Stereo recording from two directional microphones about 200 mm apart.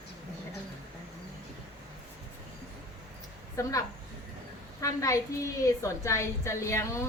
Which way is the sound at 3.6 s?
15° left (ahead or behind).